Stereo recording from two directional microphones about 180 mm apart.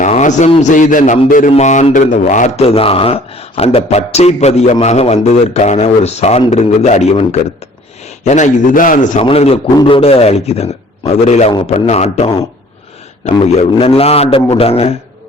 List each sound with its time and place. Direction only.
0.0 s a man's voice: 40° left (ahead or behind)
9.2 s a man's voice: 35° left (ahead or behind)